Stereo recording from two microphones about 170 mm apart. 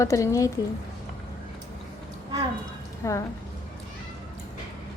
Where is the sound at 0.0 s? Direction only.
20° left (ahead or behind).